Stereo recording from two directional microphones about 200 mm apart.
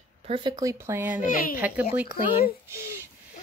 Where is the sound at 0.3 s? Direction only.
20° right (ahead or behind).